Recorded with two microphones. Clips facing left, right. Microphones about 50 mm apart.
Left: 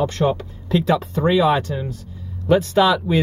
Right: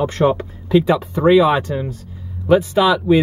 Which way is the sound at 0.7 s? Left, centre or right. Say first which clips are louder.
Right 4 dB; centre.